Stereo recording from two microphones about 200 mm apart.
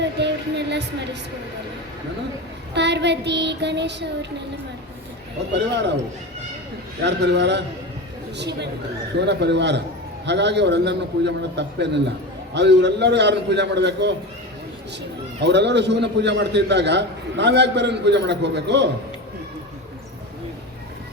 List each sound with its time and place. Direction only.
0.0 s music: 60° right (ahead or behind)
2.7 s a man's voice: 60° right (ahead or behind)
7.0 s a man's voice: 60° right (ahead or behind)
15.4 s a man's voice: 60° right (ahead or behind)